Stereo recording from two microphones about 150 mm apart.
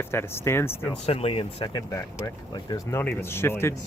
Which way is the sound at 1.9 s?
25° left (ahead or behind).